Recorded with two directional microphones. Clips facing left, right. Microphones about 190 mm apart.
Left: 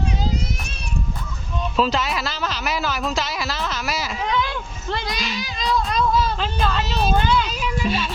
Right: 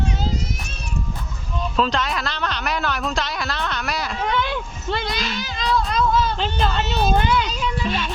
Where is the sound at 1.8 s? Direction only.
5° left (ahead or behind).